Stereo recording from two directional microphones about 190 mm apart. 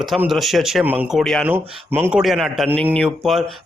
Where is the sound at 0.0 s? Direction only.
Centre (ahead or behind).